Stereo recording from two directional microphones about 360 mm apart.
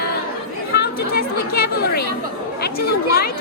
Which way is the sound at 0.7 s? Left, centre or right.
Left.